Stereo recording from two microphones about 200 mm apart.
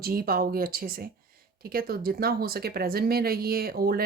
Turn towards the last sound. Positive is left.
turn(degrees=-50)  # may be behind; listen again after turning